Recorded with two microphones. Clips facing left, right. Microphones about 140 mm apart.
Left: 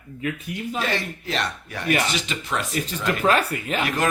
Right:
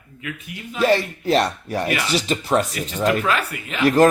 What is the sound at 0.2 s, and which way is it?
Speech, 35° left (ahead or behind).